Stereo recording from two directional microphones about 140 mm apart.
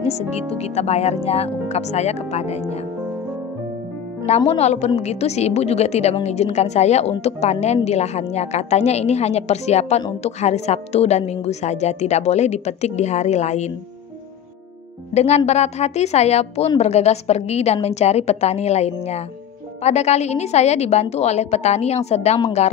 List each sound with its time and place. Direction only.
0.0 s a woman's voice: 50° left (ahead or behind)
4.5 s a woman's voice: 50° left (ahead or behind)
15.1 s a woman's voice: 50° left (ahead or behind)